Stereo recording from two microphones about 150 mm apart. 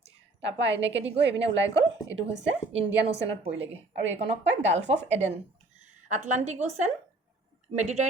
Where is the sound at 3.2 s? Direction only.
45° right (ahead or behind).